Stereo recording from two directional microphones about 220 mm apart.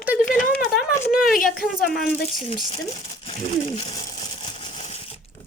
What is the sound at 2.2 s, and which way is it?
Speech, 25° left (ahead or behind).